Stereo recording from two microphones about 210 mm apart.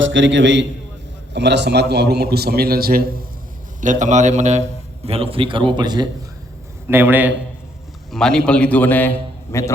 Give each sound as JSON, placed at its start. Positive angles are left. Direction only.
{"t": 0.0, "sound": "a man's voice", "side_deg": -60}
{"t": 6.8, "sound": "a man's voice", "side_deg": -10}
{"t": 8.1, "sound": "a man's voice", "side_deg": 5}